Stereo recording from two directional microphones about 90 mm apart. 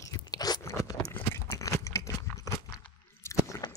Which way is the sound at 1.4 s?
40° left (ahead or behind).